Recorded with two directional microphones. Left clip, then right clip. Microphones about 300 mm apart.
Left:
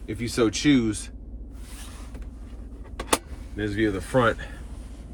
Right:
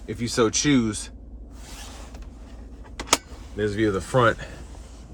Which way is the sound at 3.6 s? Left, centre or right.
Centre.